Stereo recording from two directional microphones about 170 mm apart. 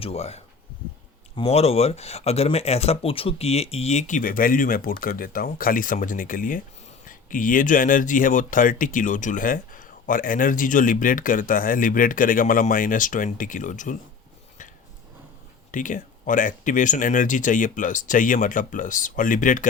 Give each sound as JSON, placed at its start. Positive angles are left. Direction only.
{"t": 0.0, "sound": "speech", "side_deg": 35}
{"t": 15.7, "sound": "speech", "side_deg": 50}